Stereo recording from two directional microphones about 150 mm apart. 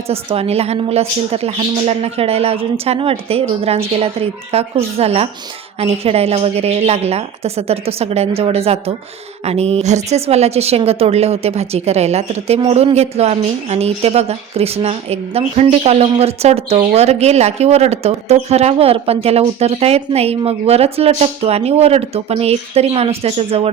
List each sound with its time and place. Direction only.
0.1 s a woman's voice: 40° right (ahead or behind)